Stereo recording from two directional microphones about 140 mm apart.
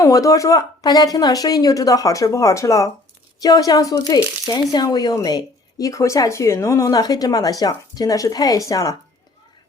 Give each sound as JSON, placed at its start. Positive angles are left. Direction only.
{"t": 0.0, "sound": "a woman's voice", "side_deg": 25}